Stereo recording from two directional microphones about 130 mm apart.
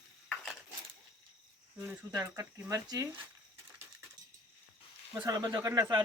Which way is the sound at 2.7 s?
25° right (ahead or behind).